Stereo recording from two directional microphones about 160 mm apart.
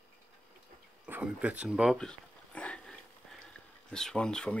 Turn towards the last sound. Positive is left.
turn(degrees=5)  # may be behind; listen again after turning